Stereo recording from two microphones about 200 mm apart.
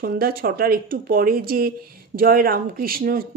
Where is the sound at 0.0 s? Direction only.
45° right (ahead or behind).